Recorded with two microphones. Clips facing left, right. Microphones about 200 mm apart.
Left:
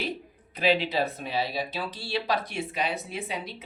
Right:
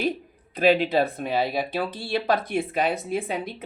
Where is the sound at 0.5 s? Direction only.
50° right (ahead or behind).